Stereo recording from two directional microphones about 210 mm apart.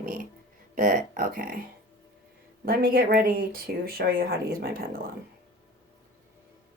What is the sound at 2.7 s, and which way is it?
Speech, 45° right (ahead or behind).